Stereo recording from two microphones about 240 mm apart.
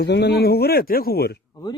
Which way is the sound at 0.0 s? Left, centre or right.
Left.